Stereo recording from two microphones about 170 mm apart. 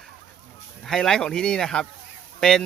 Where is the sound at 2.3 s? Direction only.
5° left (ahead or behind).